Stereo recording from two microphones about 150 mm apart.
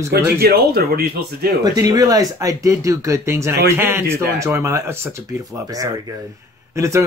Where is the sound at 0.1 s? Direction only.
90° right.